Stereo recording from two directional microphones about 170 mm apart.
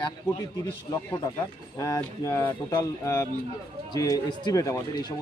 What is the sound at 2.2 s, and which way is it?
A man's voice, 20° left (ahead or behind).